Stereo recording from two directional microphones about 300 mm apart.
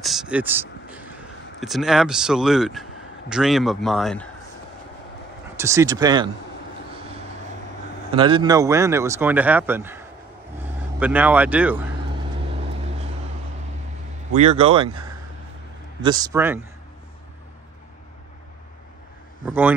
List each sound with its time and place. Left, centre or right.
0.0 s speech: centre
5.6 s speech: centre
8.1 s speech: centre
14.6 s speech: centre
16.0 s speech: centre
19.4 s speech: centre